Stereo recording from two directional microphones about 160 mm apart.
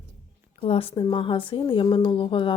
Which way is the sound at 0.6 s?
35° left (ahead or behind).